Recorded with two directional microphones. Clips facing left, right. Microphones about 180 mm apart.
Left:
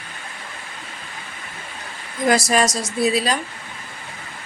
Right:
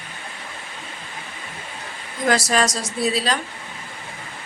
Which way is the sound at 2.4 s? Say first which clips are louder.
Left 2 dB; 10° left (ahead or behind).